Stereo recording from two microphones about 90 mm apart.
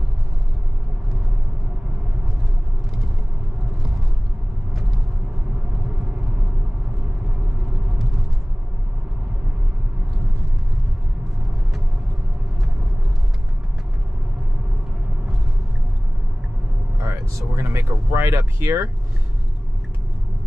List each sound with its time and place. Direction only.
17.1 s vehicle: 35° right (ahead or behind)
18.1 s speech: 30° right (ahead or behind)